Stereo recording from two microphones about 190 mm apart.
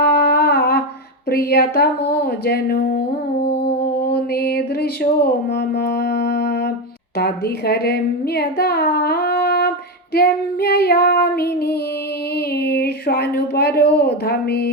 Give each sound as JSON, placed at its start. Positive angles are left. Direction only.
{"t": 0.0, "sound": "humming", "side_deg": 55}
{"t": 1.3, "sound": "speech", "side_deg": 55}
{"t": 3.6, "sound": "music", "side_deg": 60}
{"t": 7.2, "sound": "a woman's voice", "side_deg": 55}